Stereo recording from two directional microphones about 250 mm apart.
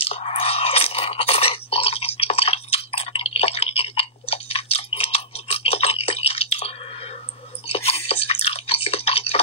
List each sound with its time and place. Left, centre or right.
0.0 s chewing: left
7.6 s drip: left